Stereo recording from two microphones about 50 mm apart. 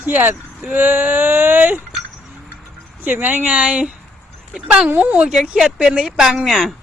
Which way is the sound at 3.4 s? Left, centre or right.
Right.